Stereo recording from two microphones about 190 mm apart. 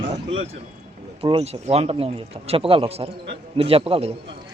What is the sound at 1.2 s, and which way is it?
Speech, 30° right (ahead or behind).